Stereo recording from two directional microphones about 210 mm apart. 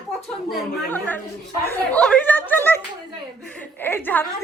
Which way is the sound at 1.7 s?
5° left (ahead or behind).